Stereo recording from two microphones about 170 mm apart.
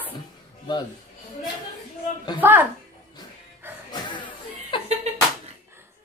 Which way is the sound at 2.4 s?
10° right (ahead or behind).